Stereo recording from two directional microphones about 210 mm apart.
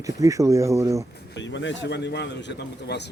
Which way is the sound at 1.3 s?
60° left (ahead or behind).